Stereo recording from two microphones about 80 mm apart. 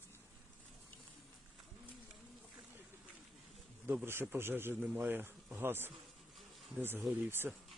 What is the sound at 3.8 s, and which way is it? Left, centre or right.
Speech, right.